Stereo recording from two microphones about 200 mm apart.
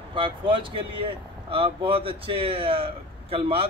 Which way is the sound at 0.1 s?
25° right (ahead or behind).